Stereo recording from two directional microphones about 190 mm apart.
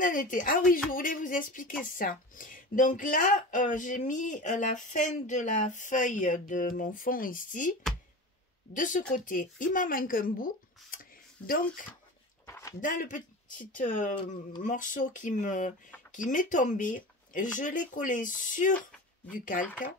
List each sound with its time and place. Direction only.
0.0 s speech: 45° left (ahead or behind)
8.7 s speech: 45° left (ahead or behind)
12.4 s a sound: 15° left (ahead or behind)
12.8 s speech: 45° left (ahead or behind)